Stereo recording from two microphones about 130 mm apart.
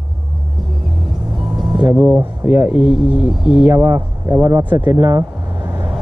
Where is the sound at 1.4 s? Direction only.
Centre (ahead or behind).